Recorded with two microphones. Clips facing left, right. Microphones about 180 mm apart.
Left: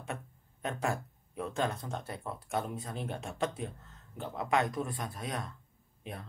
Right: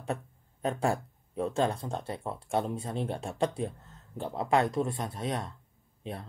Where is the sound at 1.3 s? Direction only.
30° right (ahead or behind).